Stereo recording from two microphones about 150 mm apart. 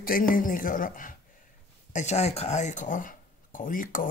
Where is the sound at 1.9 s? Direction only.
50° left (ahead or behind).